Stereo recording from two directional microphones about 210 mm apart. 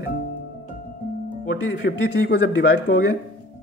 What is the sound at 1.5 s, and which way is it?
Speech, 50° left (ahead or behind).